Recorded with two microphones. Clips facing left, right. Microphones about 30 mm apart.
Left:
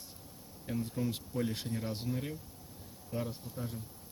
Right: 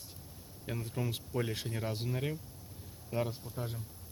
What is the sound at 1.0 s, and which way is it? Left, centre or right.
Speech, right.